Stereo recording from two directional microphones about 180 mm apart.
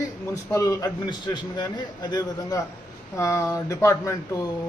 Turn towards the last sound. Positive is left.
turn(degrees=15)  # may be behind; listen again after turning